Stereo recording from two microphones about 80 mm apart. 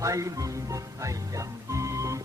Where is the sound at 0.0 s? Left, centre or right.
Right.